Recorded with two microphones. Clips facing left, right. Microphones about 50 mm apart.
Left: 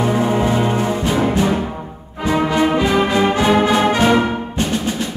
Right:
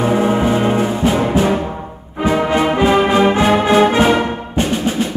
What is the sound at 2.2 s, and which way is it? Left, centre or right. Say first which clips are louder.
Music: right 1 dB; centre.